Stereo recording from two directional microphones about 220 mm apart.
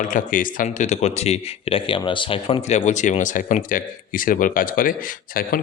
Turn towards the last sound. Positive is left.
turn(degrees=40)  # may be behind; listen again after turning